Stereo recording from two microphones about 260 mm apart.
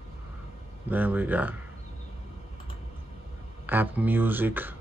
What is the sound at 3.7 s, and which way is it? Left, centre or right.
Speech, centre.